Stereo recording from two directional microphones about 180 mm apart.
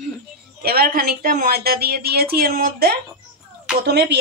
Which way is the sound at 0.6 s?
55° right (ahead or behind).